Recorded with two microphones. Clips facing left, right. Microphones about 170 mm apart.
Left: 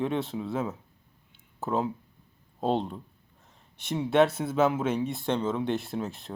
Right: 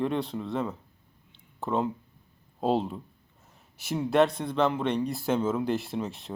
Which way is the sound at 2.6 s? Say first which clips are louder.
Right 1 dB; centre (ahead or behind).